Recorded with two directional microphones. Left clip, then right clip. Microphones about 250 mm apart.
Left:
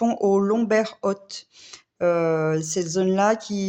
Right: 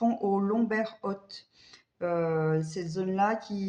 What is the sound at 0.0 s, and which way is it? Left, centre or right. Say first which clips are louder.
Speech: left 8 dB; left.